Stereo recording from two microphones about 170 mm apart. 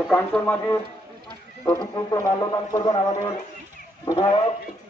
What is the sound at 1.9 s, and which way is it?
A man's voice, 20° left (ahead or behind).